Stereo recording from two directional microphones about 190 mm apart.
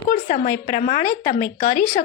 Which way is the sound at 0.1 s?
45° left (ahead or behind).